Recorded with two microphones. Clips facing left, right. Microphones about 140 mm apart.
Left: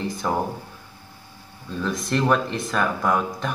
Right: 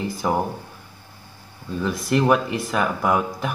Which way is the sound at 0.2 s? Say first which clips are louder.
Right 2 dB; 10° right (ahead or behind).